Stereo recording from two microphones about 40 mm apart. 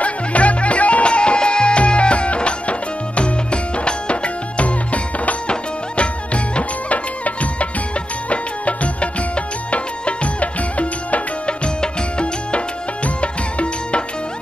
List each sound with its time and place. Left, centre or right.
0.0 s music: left